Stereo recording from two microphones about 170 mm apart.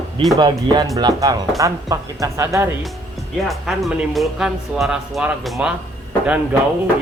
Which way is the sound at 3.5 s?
Centre (ahead or behind).